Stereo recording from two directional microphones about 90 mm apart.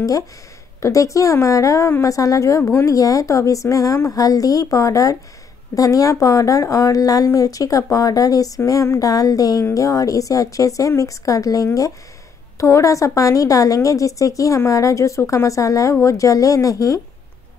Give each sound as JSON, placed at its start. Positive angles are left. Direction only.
{"t": 0.7, "sound": "a woman's voice", "side_deg": 35}